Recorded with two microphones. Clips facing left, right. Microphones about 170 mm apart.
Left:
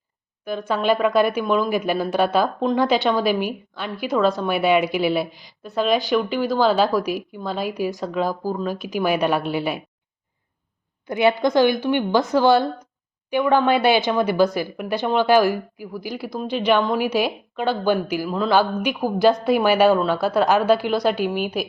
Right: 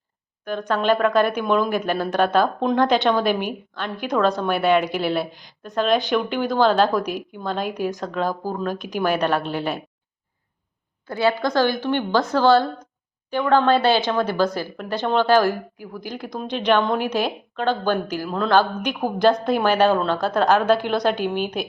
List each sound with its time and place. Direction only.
0.4 s a woman's voice: 10° left (ahead or behind)
11.0 s speech: 20° left (ahead or behind)